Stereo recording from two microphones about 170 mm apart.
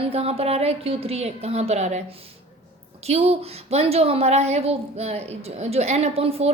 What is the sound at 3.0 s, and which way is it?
A woman's voice, 35° right (ahead or behind).